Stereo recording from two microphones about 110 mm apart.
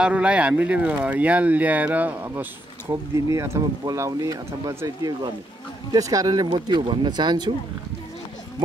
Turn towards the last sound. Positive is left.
turn(degrees=-40)  # may be behind; listen again after turning